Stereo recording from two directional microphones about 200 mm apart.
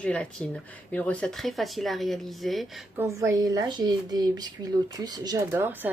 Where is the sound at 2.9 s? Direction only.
15° right (ahead or behind).